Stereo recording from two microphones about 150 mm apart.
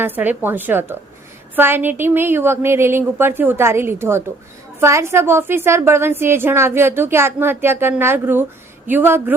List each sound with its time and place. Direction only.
0.0 s a woman's voice: 10° right (ahead or behind)